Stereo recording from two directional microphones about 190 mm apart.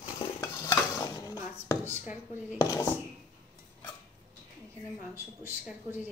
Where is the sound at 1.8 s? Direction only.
10° right (ahead or behind).